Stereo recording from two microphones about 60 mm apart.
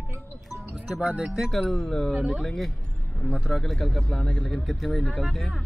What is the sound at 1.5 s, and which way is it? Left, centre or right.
Speech, centre.